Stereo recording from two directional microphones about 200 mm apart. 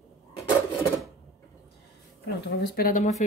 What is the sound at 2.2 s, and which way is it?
Speech, 50° left (ahead or behind).